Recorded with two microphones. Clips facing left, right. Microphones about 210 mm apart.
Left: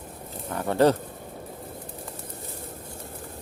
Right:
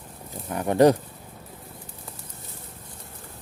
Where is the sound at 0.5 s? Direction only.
15° right (ahead or behind).